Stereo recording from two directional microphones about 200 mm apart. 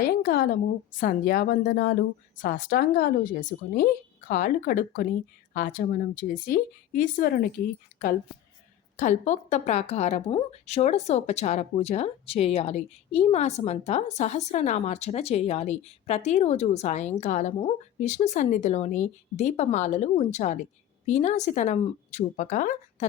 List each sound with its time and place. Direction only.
0.1 s a sound: 45° left (ahead or behind)
0.9 s speech: 45° left (ahead or behind)
9.0 s speech: 40° left (ahead or behind)